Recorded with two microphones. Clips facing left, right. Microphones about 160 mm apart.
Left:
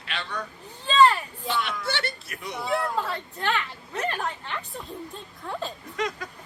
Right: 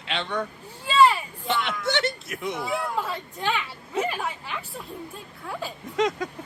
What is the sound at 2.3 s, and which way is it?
Speech, 90° right.